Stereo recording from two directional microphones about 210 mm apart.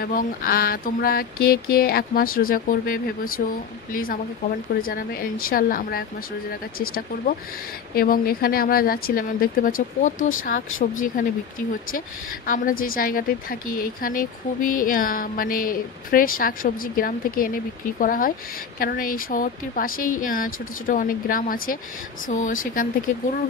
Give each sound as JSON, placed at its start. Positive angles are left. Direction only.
{"t": 0.0, "sound": "a sound", "side_deg": 40}
{"t": 10.8, "sound": "a woman's voice", "side_deg": 40}
{"t": 12.4, "sound": "a woman's voice", "side_deg": 40}